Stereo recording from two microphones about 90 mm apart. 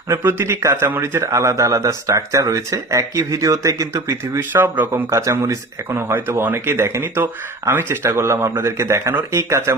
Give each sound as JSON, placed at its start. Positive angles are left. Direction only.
{"t": 0.1, "sound": "speech", "side_deg": -25}
{"t": 5.1, "sound": "speech", "side_deg": -35}